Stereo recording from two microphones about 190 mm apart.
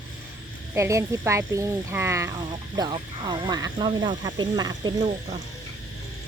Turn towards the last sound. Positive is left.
turn(degrees=-20)  # may be behind; listen again after turning